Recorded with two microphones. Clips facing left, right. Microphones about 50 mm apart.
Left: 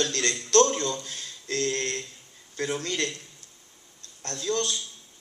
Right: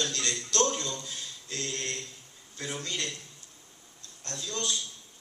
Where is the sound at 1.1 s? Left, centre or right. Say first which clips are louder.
Left 6 dB; left.